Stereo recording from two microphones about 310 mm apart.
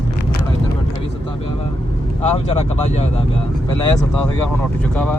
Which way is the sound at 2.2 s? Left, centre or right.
Centre.